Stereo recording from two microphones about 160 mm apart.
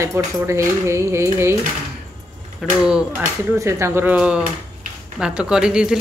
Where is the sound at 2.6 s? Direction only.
5° right (ahead or behind).